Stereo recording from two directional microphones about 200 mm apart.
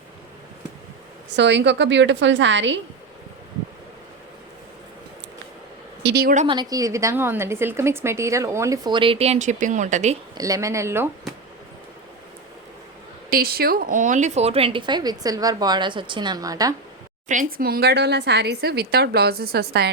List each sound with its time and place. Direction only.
1.3 s a woman's voice: 60° right (ahead or behind)
6.0 s a woman's voice: 55° right (ahead or behind)
6.5 s a woman's voice: 20° right (ahead or behind); by 10.2 s 35° right (ahead or behind)
10.3 s a woman's voice: 15° right (ahead or behind)
13.3 s speech: 50° right (ahead or behind); by 16.7 s 20° right (ahead or behind)
17.2 s speech: 45° right (ahead or behind)